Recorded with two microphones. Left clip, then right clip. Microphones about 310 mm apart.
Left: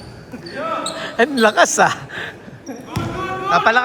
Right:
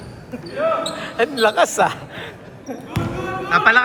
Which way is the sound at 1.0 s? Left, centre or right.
Left.